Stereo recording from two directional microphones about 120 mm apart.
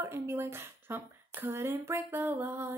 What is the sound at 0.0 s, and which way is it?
Speech, 20° right (ahead or behind).